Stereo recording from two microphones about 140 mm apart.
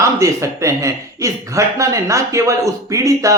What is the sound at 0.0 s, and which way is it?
Speech, 20° right (ahead or behind).